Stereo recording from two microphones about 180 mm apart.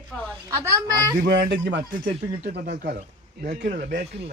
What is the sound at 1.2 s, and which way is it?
Speech, 85° right.